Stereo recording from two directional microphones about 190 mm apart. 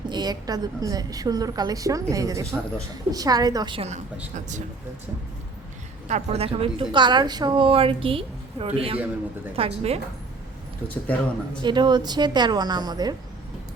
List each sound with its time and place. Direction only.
0.1 s a woman's voice: 20° right (ahead or behind)
6.1 s a woman's voice: 35° right (ahead or behind)
10.8 s speech: 10° left (ahead or behind)
11.6 s a woman's voice: 25° right (ahead or behind)